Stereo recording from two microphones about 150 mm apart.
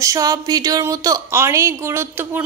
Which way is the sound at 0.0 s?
25° right (ahead or behind).